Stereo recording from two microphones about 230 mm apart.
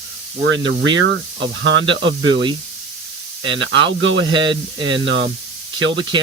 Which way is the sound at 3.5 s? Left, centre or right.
Right.